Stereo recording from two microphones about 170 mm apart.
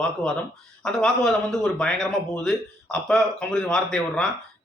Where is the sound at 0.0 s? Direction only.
5° left (ahead or behind).